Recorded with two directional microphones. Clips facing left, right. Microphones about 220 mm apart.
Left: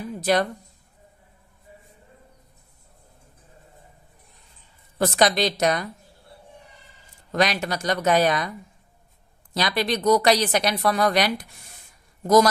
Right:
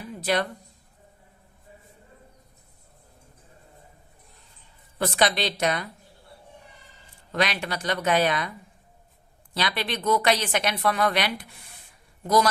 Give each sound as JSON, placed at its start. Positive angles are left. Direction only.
{"t": 0.2, "sound": "a woman's voice", "side_deg": 45}
{"t": 4.9, "sound": "speech", "side_deg": 45}
{"t": 7.3, "sound": "speech", "side_deg": 40}
{"t": 9.6, "sound": "a woman's voice", "side_deg": 40}